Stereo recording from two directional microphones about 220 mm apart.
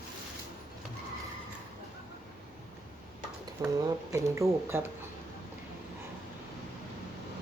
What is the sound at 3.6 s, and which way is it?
Speech, 15° right (ahead or behind).